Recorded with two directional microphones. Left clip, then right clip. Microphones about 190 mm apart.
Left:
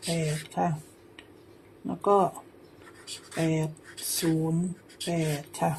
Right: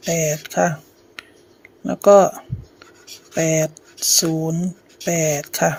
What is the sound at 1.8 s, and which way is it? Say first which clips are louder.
Speech: right 12 dB; 40° right (ahead or behind).